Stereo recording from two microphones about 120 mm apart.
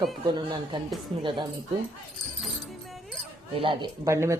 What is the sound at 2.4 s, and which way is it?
Music, centre (ahead or behind).